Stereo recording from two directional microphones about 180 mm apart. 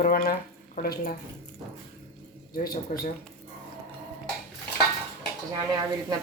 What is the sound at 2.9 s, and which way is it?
Speech, 45° left (ahead or behind).